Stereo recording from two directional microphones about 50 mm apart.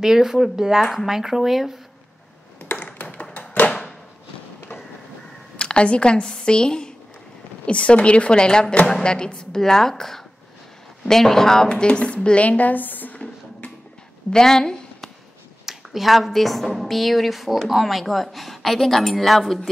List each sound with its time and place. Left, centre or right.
0.0 s speech: centre
2.8 s tap: left
3.3 s a sound: left
5.6 s a woman's voice: left
14.3 s a woman's voice: centre
15.6 s a woman's voice: centre